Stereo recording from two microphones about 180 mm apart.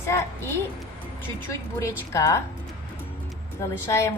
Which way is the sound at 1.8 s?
15° left (ahead or behind).